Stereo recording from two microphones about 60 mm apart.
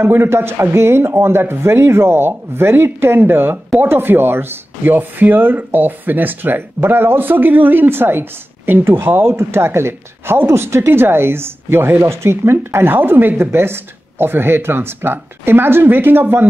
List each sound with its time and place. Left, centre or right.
0.0 s speech: right